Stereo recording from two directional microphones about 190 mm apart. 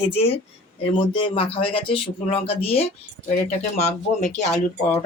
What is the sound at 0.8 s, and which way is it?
Speech, 30° left (ahead or behind).